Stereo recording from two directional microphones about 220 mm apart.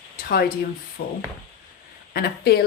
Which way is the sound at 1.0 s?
45° left (ahead or behind).